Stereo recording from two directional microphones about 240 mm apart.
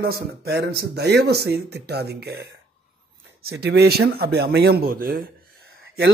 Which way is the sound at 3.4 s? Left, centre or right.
Right.